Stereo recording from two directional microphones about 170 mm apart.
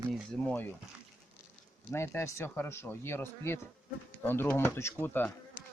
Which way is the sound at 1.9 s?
15° left (ahead or behind).